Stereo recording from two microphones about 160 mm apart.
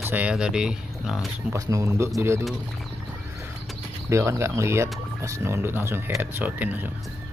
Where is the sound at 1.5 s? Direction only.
20° right (ahead or behind).